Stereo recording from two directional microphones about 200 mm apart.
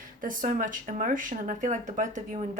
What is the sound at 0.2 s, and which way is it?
Speech, 40° right (ahead or behind).